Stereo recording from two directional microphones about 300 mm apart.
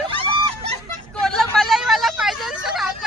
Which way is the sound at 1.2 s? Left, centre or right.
Centre.